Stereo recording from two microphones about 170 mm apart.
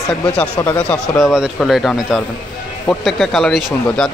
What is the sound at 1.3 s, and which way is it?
Speech, centre (ahead or behind).